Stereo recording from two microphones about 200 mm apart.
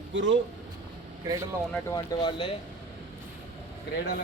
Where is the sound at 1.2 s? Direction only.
15° right (ahead or behind).